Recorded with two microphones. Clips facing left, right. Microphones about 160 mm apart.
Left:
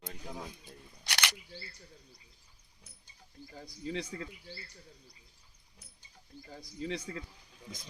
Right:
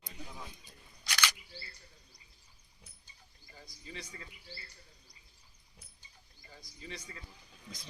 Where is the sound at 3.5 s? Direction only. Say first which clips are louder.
Left 10 dB; 80° left.